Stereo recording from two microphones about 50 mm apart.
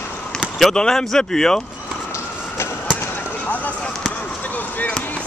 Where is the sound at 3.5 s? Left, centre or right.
Left.